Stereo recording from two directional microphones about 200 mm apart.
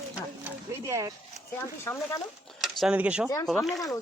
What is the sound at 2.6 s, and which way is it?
Speech, centre (ahead or behind).